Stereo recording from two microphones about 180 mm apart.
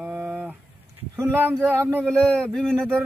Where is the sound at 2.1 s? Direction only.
5° left (ahead or behind).